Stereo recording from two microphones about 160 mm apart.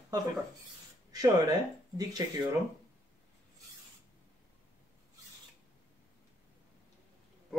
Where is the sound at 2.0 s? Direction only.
25° right (ahead or behind).